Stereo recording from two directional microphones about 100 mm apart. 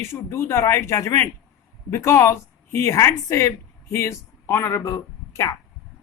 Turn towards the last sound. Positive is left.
turn(degrees=30)  # may be behind; listen again after turning